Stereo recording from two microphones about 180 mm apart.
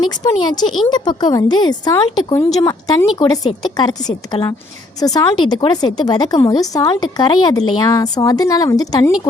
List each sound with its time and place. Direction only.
0.0 s a woman's voice: 20° left (ahead or behind)